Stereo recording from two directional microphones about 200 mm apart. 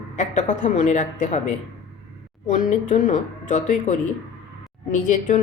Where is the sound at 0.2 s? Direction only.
35° left (ahead or behind).